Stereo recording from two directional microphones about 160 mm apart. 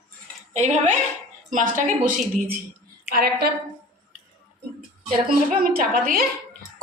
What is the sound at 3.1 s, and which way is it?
Speech, 75° right (ahead or behind).